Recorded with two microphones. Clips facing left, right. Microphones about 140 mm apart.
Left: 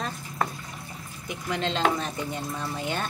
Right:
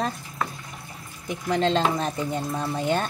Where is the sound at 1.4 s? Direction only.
40° right (ahead or behind).